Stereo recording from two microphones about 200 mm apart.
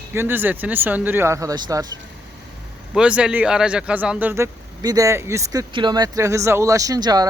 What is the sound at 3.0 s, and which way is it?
Speech, 5° right (ahead or behind).